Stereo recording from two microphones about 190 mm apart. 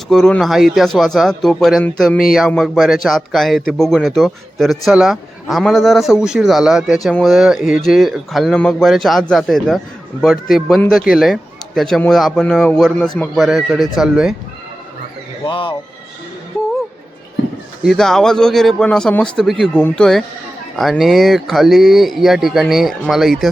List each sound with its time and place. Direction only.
0.1 s a man's voice: 5° left (ahead or behind)
15.4 s speech: 25° left (ahead or behind)
17.8 s a man's voice: centre (ahead or behind)